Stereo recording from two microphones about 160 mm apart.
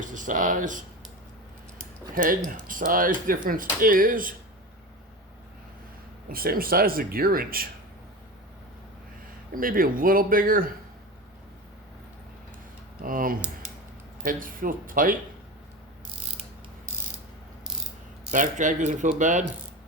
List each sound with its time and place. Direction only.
0.0 s speech: 55° right (ahead or behind)
2.1 s speech: 60° right (ahead or behind)
6.2 s speech: 65° right (ahead or behind)
9.6 s speech: 60° right (ahead or behind)
13.0 s speech: 60° right (ahead or behind)
18.3 s speech: 50° right (ahead or behind)